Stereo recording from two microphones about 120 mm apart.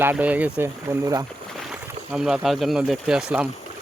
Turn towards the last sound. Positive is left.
turn(degrees=-5)  # may be behind; listen again after turning